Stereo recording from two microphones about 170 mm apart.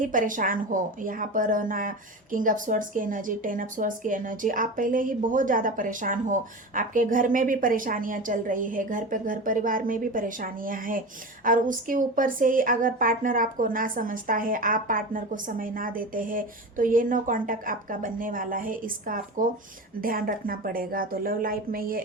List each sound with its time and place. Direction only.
0.0 s a woman's voice: 50° right (ahead or behind)